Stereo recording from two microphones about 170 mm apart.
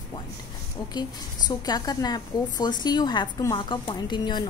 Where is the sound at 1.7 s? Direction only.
25° left (ahead or behind).